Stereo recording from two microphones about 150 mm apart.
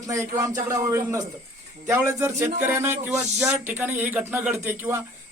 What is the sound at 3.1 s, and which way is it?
Speech, 5° right (ahead or behind).